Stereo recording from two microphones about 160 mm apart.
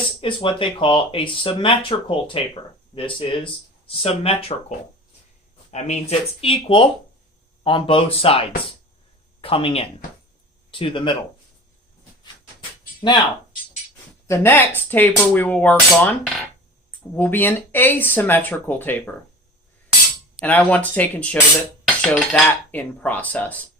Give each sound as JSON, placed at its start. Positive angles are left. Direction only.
{"t": 0.2, "sound": "speech", "side_deg": 30}
{"t": 5.7, "sound": "speech", "side_deg": 40}
{"t": 13.0, "sound": "speech", "side_deg": 30}
{"t": 14.3, "sound": "speech", "side_deg": 15}
{"t": 16.0, "sound": "dishes", "side_deg": 0}
{"t": 17.2, "sound": "speech", "side_deg": 10}
{"t": 20.4, "sound": "speech", "side_deg": 10}
{"t": 21.8, "sound": "cutlery", "side_deg": 5}